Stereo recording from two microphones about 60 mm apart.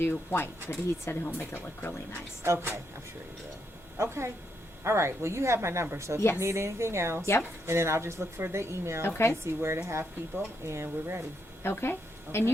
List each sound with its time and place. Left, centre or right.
0.0 s a woman's voice: left
2.4 s a woman's voice: right
3.9 s a woman's voice: right
6.1 s a woman's voice: left
6.4 s a woman's voice: right
9.0 s a woman's voice: left
9.3 s a woman's voice: right
11.6 s a woman's voice: left